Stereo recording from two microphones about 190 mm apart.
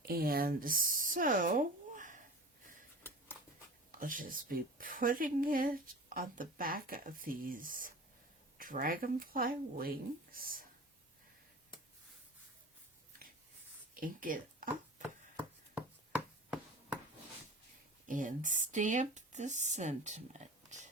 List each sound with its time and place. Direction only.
0.0 s speech: 50° right (ahead or behind)
4.0 s speech: 45° right (ahead or behind)
13.9 s speech: 45° right (ahead or behind)
15.7 s chopping: 5° right (ahead or behind)
18.0 s speech: 40° right (ahead or behind)
20.7 s a sound: 40° right (ahead or behind)